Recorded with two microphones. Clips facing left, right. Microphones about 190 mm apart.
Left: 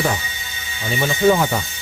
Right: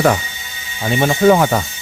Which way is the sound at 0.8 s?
55° right (ahead or behind).